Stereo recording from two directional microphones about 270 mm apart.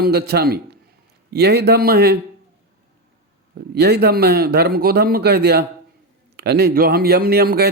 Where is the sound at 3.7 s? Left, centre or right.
Right.